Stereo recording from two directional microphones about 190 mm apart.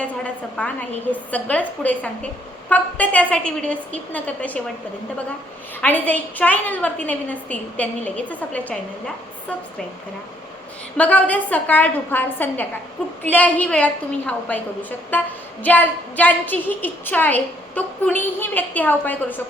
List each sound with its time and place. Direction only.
0.5 s a woman's voice: 5° left (ahead or behind)
5.8 s a woman's voice: 10° left (ahead or behind)
10.9 s a woman's voice: 5° left (ahead or behind)